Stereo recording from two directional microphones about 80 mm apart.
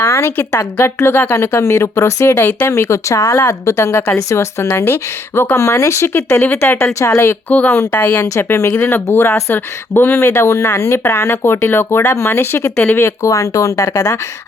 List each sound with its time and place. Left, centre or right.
0.0 s speech: left
2.3 s speech: left
6.3 s speech: centre
6.6 s speech: left
7.5 s speech: centre
8.2 s speech: left
12.7 s speech: centre
13.0 s speech: left